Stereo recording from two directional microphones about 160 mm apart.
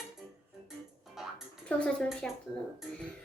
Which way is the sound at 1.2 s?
Centre (ahead or behind).